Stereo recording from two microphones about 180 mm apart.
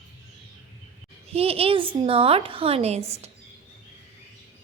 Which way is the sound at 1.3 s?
35° right (ahead or behind).